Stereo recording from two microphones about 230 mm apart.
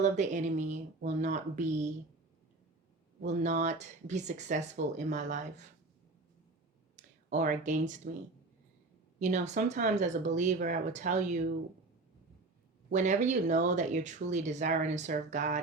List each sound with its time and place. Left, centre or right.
0.0 s speech: right
3.2 s speech: right
6.9 s speech: right
9.1 s speech: right
12.9 s speech: right